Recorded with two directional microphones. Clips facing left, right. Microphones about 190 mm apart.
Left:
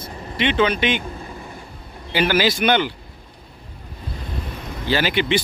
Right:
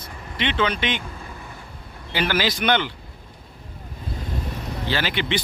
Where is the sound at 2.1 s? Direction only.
10° left (ahead or behind).